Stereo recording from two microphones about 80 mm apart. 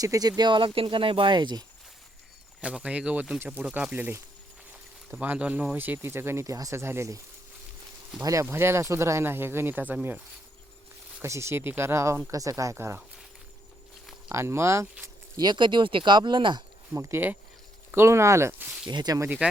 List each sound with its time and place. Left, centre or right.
0.0 s speech: right
2.6 s speech: centre
5.2 s speech: centre; by 7.2 s right
8.2 s speech: right
8.4 s speech: right
11.2 s speech: right
12.3 s speech: right
14.3 s speech: right
15.4 s speech: right
16.9 s speech: right
18.9 s speech: right
19.4 s speech: centre